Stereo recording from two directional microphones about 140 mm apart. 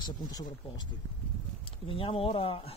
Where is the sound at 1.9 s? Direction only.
40° left (ahead or behind).